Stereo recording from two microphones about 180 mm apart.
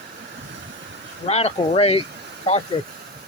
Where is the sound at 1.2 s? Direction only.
35° left (ahead or behind).